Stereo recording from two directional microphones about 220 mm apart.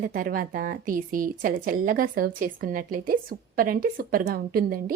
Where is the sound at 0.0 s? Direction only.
40° right (ahead or behind).